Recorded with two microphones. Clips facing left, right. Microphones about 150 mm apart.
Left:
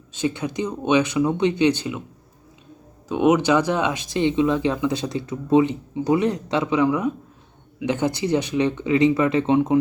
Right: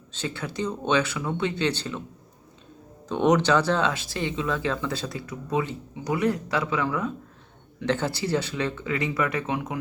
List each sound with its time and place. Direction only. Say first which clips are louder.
0.1 s speech: left 8 dB; 15° left (ahead or behind)
3.1 s speech: left 3 dB; 10° left (ahead or behind); by 9.7 s 25° left (ahead or behind)